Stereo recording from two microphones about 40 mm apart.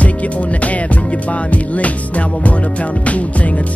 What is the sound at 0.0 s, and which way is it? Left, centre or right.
Music, left.